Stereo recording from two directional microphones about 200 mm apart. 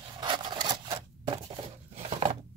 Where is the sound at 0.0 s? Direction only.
25° right (ahead or behind).